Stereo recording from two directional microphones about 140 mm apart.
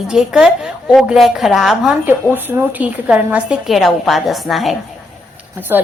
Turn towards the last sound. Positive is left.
turn(degrees=-15)  # may be behind; listen again after turning